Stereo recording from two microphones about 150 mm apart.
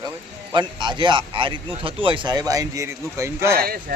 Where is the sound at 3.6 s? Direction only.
75° right (ahead or behind).